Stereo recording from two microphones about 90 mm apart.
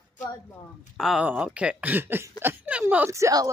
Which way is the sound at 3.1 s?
40° right (ahead or behind).